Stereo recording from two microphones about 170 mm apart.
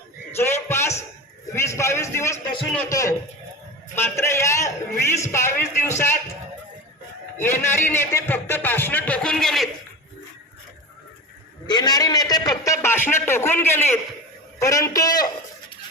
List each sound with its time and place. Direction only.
0.3 s a sound: 15° left (ahead or behind)
2.7 s a man's voice: 15° left (ahead or behind)
7.3 s a man's voice: 15° left (ahead or behind)
11.7 s a man's voice: 25° left (ahead or behind)